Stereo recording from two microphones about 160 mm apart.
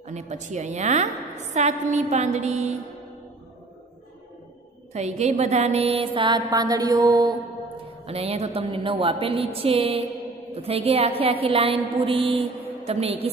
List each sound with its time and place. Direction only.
0.0 s a woman's voice: 45° right (ahead or behind)
4.9 s mantra: 45° right (ahead or behind); by 7.3 s 25° right (ahead or behind)
8.1 s mantra: 40° right (ahead or behind)